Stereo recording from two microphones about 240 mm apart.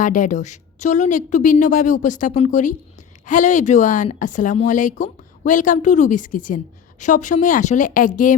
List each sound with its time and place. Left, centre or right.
0.0 s speech: left